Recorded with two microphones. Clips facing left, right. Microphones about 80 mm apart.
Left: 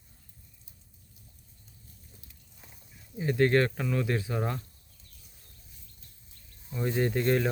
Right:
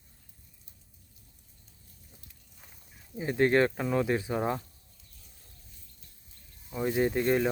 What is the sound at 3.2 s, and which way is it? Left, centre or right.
Speech, centre.